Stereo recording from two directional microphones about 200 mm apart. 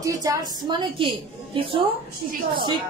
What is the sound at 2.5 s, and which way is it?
Speech, 25° right (ahead or behind).